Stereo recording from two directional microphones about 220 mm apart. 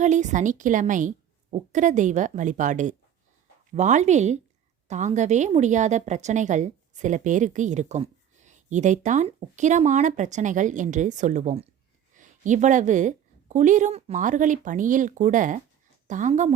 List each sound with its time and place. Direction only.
0.0 s a woman's voice: 35° right (ahead or behind)